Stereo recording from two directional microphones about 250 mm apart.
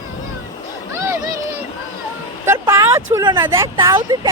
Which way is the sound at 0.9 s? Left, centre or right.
Centre.